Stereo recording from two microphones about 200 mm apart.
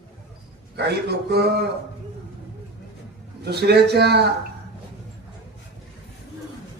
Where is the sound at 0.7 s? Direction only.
55° right (ahead or behind).